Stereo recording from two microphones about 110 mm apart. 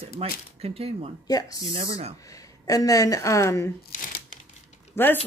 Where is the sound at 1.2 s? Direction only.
35° left (ahead or behind).